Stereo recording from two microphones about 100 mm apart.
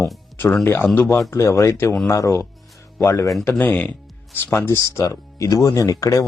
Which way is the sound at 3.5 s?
15° left (ahead or behind).